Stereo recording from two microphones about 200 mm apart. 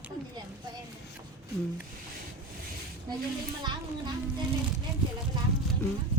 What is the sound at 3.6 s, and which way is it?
Speech, 20° right (ahead or behind).